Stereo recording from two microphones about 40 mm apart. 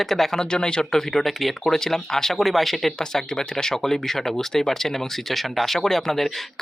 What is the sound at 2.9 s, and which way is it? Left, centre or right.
Speech, centre.